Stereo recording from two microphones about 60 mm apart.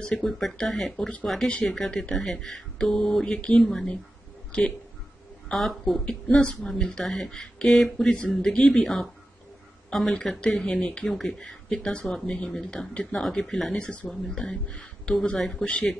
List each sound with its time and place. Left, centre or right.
0.0 s speech: centre
5.5 s speech: centre
6.0 s speech: centre